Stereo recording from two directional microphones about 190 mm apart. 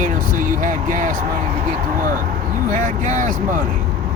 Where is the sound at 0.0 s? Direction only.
45° right (ahead or behind).